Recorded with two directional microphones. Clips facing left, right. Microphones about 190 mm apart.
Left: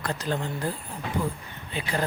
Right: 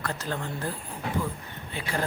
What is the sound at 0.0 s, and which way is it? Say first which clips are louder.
Speech: left 3 dB; 15° left (ahead or behind).